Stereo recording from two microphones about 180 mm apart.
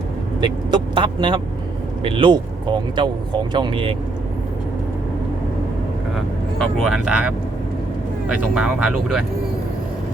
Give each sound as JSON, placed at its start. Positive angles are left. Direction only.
{"t": 0.4, "sound": "speech", "side_deg": -25}
{"t": 6.1, "sound": "speech", "side_deg": 0}